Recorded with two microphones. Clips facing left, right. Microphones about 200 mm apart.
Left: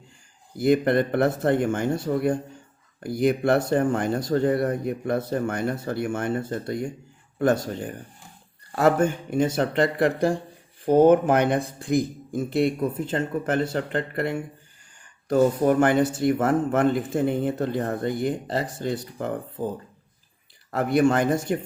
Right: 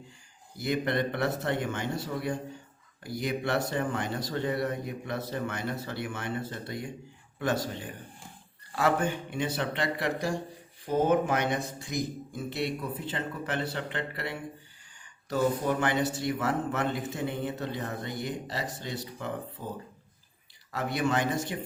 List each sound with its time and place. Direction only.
0.5 s a man's voice: 50° left (ahead or behind)
20.7 s a man's voice: 50° left (ahead or behind)